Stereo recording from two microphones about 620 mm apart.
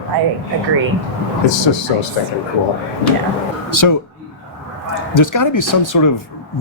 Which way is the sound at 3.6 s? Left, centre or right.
Left.